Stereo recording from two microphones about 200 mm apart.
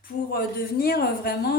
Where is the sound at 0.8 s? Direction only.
50° left (ahead or behind).